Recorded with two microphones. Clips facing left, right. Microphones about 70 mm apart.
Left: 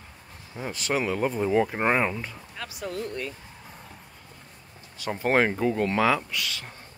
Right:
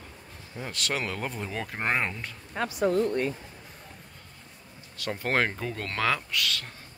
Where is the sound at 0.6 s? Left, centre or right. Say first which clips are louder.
Left 4 dB; centre.